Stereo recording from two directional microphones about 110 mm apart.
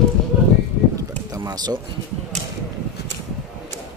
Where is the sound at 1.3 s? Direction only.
35° right (ahead or behind).